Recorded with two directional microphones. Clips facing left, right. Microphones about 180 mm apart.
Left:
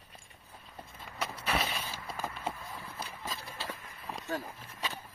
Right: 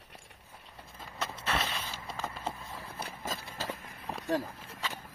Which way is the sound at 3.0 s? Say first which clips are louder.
Right 4 dB; 45° right (ahead or behind).